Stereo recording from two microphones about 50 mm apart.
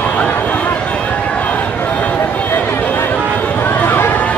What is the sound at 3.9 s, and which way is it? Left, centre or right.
Run, left.